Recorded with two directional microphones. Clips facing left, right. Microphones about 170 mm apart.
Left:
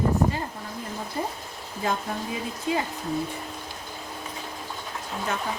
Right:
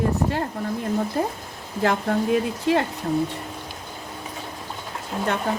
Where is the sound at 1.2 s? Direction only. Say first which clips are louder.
Right 5 dB; 75° right (ahead or behind).